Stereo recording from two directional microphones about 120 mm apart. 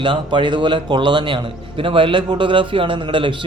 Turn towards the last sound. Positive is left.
turn(degrees=-45)  # may be behind; listen again after turning